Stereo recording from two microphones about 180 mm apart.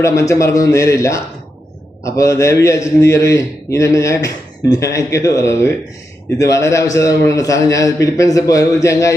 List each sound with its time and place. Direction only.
0.0 s a man's voice: 15° left (ahead or behind)